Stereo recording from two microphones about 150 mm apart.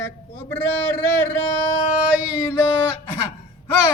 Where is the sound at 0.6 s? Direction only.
15° left (ahead or behind).